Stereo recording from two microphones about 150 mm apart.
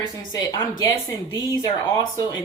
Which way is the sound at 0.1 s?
25° left (ahead or behind).